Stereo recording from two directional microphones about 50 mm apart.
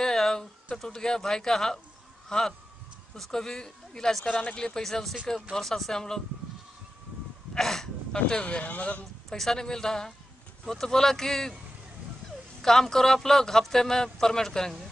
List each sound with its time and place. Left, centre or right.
0.0 s a sound: centre
0.8 s speech: centre
4.3 s speech: left
4.6 s speech: centre
7.5 s speech: centre; by 9.0 s left
9.3 s speech: centre
12.6 s speech: centre